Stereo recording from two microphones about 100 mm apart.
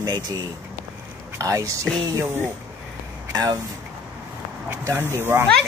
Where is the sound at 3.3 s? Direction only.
40° right (ahead or behind).